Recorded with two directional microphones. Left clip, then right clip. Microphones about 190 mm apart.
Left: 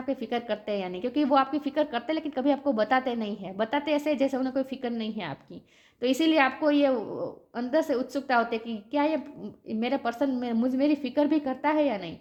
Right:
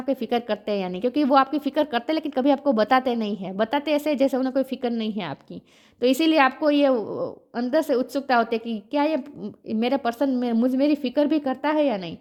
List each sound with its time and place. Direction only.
0.0 s a woman's voice: 50° right (ahead or behind)